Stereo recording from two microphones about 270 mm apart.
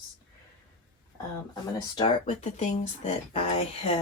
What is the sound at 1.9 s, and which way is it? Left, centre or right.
Speech, centre.